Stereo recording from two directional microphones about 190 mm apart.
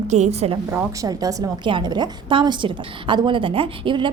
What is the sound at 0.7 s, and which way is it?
A woman's voice, 15° right (ahead or behind).